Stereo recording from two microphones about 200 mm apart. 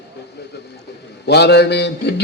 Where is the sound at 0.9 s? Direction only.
55° left (ahead or behind).